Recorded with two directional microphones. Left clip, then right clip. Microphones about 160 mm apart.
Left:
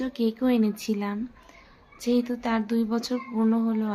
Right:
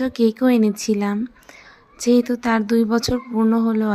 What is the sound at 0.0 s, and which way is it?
Speech, 45° right (ahead or behind).